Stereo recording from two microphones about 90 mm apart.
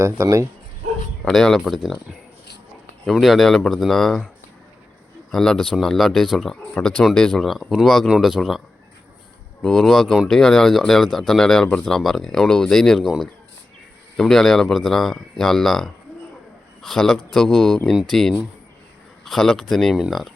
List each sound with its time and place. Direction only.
0.0 s speech: 35° right (ahead or behind)
1.2 s speech: 5° left (ahead or behind)
3.1 s speech: centre (ahead or behind)
5.3 s speech: 5° left (ahead or behind)